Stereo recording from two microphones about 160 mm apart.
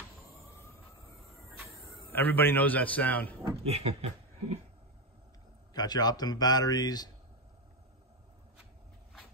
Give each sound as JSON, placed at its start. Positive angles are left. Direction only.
{"t": 1.6, "sound": "a sound", "side_deg": 0}
{"t": 2.1, "sound": "a man's voice", "side_deg": 10}
{"t": 3.5, "sound": "speech", "side_deg": -40}
{"t": 5.7, "sound": "a man's voice", "side_deg": 25}